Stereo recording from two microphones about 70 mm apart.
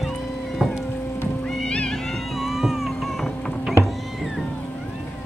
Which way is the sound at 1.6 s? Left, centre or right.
Centre.